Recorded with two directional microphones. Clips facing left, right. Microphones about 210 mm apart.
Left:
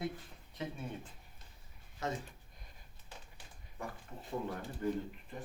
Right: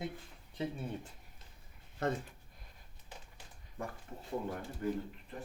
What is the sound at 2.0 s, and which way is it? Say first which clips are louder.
Speech: right 4 dB; 55° right (ahead or behind).